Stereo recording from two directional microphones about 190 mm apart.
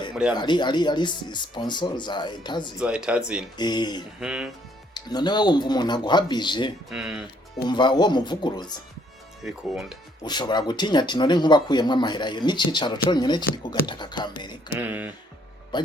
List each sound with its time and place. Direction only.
0.3 s speech: 25° left (ahead or behind)
2.7 s speech: 5° right (ahead or behind)
3.6 s speech: 20° left (ahead or behind)
4.2 s speech: 5° right (ahead or behind)
4.9 s speech: 20° left (ahead or behind)
6.9 s speech: 5° right (ahead or behind)
7.7 s speech: 25° left (ahead or behind)
9.4 s speech: centre (ahead or behind)
10.2 s speech: 20° left (ahead or behind)
14.8 s speech: 10° right (ahead or behind)
15.7 s speech: 25° left (ahead or behind)